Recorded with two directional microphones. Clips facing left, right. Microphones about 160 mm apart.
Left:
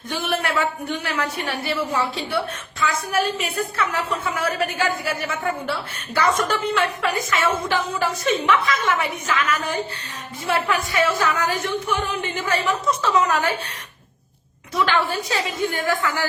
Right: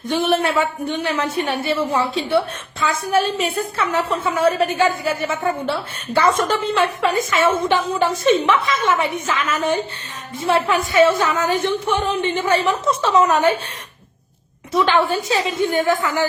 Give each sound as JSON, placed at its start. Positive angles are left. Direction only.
{"t": 0.1, "sound": "a woman's voice", "side_deg": -25}
{"t": 14.7, "sound": "a woman's voice", "side_deg": -25}